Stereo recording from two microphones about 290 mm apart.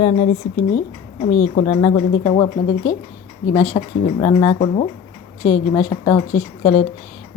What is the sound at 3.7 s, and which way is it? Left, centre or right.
Speech, centre.